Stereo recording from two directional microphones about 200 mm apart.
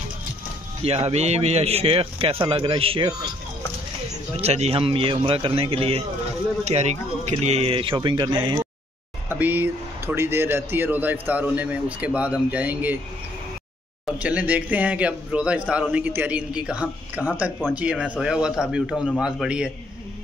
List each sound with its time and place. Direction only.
0.8 s a man's voice: 30° right (ahead or behind)
4.4 s a man's voice: 30° right (ahead or behind)
9.3 s speech: 10° right (ahead or behind)
14.0 s a man's voice: 5° right (ahead or behind)